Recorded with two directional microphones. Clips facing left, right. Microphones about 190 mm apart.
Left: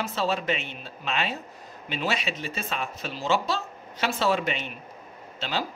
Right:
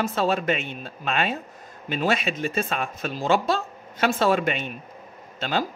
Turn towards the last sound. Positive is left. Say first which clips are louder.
# right 4 dB
turn(degrees=-50)  # may be behind; listen again after turning